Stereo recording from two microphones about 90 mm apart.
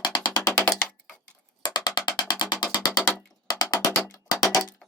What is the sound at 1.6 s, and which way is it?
Music, 50° left (ahead or behind).